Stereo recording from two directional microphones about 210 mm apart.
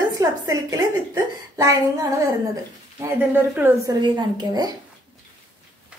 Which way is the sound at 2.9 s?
10° right (ahead or behind).